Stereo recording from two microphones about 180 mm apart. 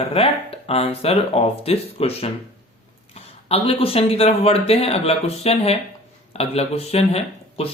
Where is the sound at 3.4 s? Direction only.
35° left (ahead or behind).